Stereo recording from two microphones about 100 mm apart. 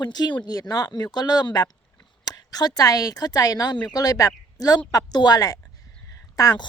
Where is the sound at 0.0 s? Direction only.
45° left (ahead or behind).